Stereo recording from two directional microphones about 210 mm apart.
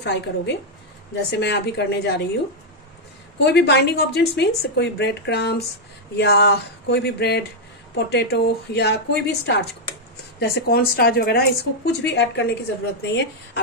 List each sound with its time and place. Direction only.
0.0 s a woman's voice: 55° left (ahead or behind)
3.3 s a woman's voice: 50° left (ahead or behind)